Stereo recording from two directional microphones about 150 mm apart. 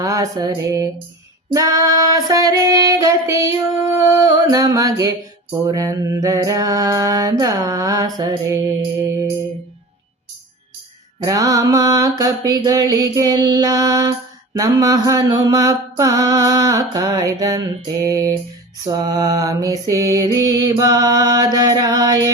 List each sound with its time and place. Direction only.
0.0 s mantra: 20° right (ahead or behind)
11.2 s mantra: 25° right (ahead or behind)